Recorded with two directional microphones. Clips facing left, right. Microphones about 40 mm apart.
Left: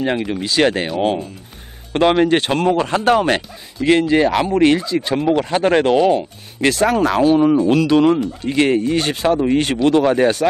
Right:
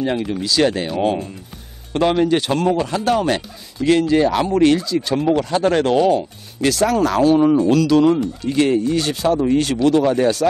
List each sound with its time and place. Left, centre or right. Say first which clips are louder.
0.0 s speech: left 1 dB; left
2.0 s speech: left 2 dB; left
6.6 s speech: left 1 dB; left; by 7.6 s centre
7.6 s speech: left 1 dB; left